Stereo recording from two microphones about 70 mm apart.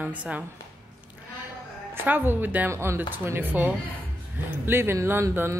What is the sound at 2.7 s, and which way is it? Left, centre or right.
Speech, right.